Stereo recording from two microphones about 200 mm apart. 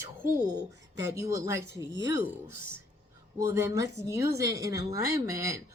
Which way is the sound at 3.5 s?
15° right (ahead or behind).